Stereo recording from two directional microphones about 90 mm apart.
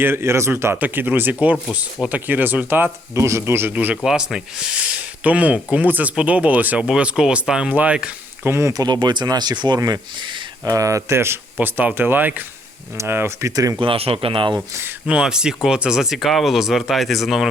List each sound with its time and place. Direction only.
0.0 s speech: 25° right (ahead or behind)
3.2 s speech: 35° right (ahead or behind)
4.0 s speech: 5° right (ahead or behind)
8.4 s speech: 30° right (ahead or behind)
8.7 s speech: 50° right (ahead or behind)
10.7 s speech: 35° right (ahead or behind)
11.5 s speech: 15° right (ahead or behind); by 13.7 s 35° right (ahead or behind)
13.7 s speech: 85° right; by 14.6 s 65° right (ahead or behind)
14.7 s speech: 25° right (ahead or behind)
15.0 s speech: 10° right (ahead or behind)